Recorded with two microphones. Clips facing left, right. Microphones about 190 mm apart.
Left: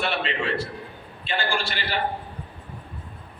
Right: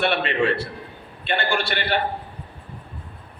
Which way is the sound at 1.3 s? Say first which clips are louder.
Right 4 dB; 65° right (ahead or behind).